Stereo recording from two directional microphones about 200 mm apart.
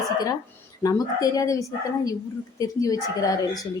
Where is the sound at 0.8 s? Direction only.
20° left (ahead or behind).